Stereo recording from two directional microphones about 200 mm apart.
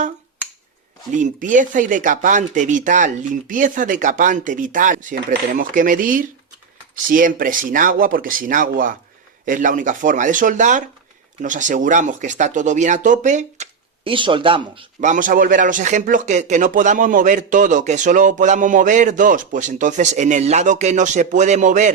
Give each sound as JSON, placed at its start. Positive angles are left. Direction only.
{"t": 1.1, "sound": "speech", "side_deg": -40}
{"t": 15.1, "sound": "speech", "side_deg": -40}